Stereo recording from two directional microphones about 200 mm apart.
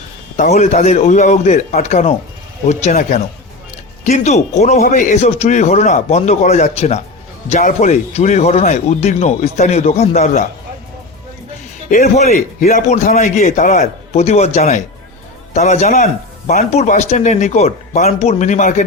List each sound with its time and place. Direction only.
0.3 s speech: 35° left (ahead or behind)
11.9 s speech: 40° left (ahead or behind)